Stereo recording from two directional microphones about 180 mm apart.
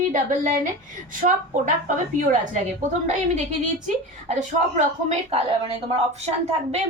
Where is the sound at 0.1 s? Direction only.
45° right (ahead or behind).